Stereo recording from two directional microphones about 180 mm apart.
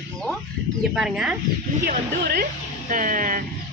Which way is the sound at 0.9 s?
5° right (ahead or behind).